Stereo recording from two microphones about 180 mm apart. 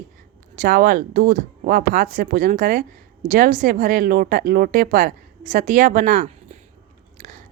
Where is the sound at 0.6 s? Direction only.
55° right (ahead or behind).